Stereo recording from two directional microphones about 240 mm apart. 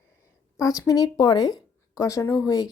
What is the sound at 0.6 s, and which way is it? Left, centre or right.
Speech, centre.